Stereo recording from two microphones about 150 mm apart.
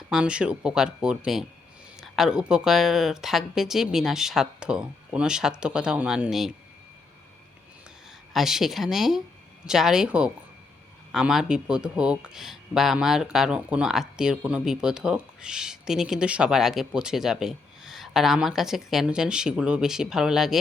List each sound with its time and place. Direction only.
0.1 s speech: 5° right (ahead or behind)
8.3 s speech: centre (ahead or behind)